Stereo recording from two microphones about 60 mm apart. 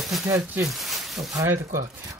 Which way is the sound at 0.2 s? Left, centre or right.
Right.